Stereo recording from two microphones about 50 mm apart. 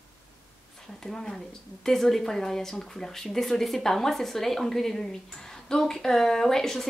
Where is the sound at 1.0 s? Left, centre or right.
Centre.